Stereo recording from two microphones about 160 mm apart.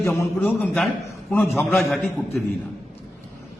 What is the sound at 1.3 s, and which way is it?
Speech, 15° left (ahead or behind).